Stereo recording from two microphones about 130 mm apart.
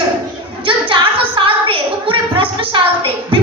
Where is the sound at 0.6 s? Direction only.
40° right (ahead or behind).